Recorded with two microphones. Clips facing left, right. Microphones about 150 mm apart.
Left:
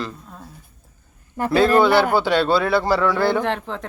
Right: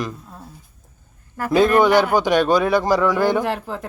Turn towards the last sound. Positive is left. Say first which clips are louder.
# even
turn(degrees=-5)  # may be behind; listen again after turning